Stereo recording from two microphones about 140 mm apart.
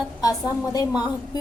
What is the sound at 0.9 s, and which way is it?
Speech, 5° right (ahead or behind).